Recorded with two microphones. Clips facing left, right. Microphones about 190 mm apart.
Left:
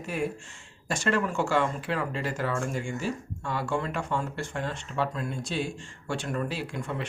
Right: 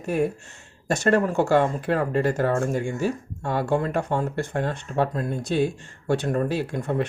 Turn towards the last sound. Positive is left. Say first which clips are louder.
# right 8 dB
turn(degrees=-55)  # may be behind; listen again after turning